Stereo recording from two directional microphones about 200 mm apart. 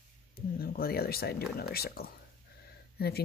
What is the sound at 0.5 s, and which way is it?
Speech, 50° left (ahead or behind).